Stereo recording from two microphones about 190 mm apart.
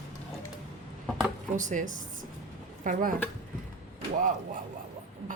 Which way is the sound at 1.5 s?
40° right (ahead or behind).